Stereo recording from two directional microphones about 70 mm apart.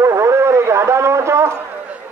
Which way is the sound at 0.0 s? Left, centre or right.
Right.